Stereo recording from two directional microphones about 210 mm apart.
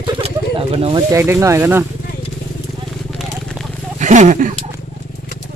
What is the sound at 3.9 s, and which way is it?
Wild animals, 35° right (ahead or behind).